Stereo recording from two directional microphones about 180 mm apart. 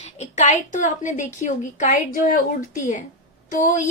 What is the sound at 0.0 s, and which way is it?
A woman's voice, 40° left (ahead or behind).